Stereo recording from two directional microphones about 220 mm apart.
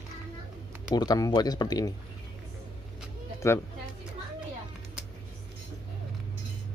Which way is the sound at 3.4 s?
15° left (ahead or behind).